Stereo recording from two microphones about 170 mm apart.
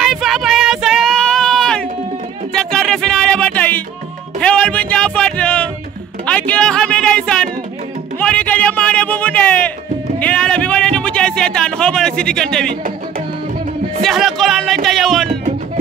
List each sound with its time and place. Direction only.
0.0 s child singing: centre (ahead or behind)
2.5 s music: 5° left (ahead or behind)
8.2 s a sound: 10° left (ahead or behind)
14.0 s speech: centre (ahead or behind)